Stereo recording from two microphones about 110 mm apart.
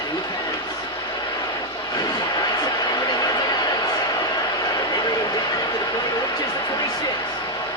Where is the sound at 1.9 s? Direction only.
35° left (ahead or behind).